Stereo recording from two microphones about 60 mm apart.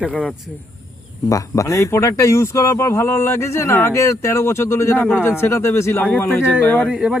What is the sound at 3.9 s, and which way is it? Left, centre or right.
Speech, left.